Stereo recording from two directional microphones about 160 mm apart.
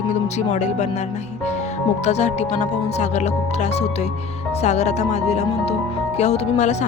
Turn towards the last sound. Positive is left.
turn(degrees=45)  # may be behind; listen again after turning